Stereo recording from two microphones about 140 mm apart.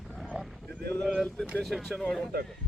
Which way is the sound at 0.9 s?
5° left (ahead or behind).